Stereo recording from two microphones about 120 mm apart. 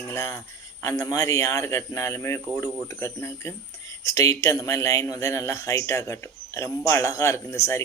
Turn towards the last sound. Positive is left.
turn(degrees=25)  # may be behind; listen again after turning